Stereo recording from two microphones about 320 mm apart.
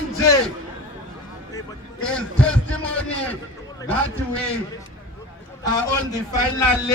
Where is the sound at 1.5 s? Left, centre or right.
Centre.